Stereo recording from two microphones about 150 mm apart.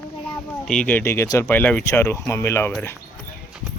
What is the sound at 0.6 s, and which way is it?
Speech, 5° left (ahead or behind).